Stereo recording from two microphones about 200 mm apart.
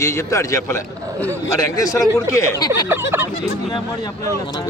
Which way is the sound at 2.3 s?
20° left (ahead or behind).